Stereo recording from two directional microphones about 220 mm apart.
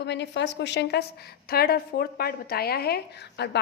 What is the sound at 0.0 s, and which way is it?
A woman's voice, 50° left (ahead or behind).